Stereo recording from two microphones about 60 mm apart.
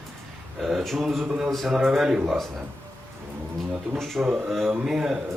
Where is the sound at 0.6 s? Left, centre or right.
Centre.